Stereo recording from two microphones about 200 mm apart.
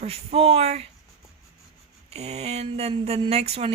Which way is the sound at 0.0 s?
30° right (ahead or behind).